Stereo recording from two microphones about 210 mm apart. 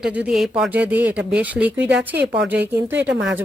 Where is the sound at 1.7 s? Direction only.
55° right (ahead or behind).